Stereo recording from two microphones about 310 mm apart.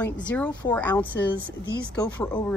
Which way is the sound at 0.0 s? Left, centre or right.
Centre.